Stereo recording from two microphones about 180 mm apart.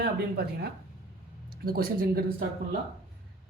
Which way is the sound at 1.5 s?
55° right (ahead or behind).